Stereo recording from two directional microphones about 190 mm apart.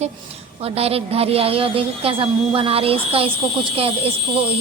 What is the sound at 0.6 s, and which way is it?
A woman's voice, 30° right (ahead or behind).